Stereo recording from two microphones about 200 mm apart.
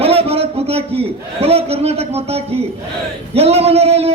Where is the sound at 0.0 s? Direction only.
30° right (ahead or behind).